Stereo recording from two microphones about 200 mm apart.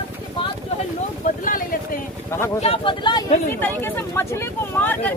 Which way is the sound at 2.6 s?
25° left (ahead or behind).